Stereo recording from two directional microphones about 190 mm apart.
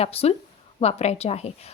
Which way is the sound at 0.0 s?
30° left (ahead or behind).